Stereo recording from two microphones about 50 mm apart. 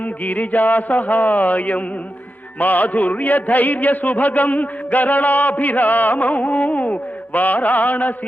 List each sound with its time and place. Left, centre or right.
0.0 s music: left